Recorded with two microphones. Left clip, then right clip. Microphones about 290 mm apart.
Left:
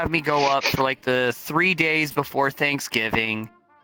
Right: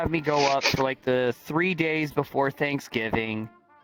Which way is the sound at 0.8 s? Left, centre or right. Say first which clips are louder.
Left 3 dB; left.